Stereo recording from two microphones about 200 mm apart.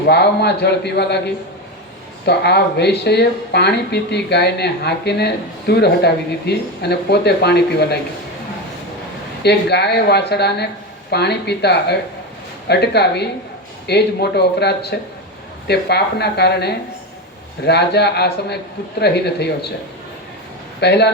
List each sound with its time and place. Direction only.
0.1 s speech: 55° left (ahead or behind)
2.2 s speech: 55° left (ahead or behind)
9.4 s speech: 55° left (ahead or behind)
20.8 s speech: 55° left (ahead or behind)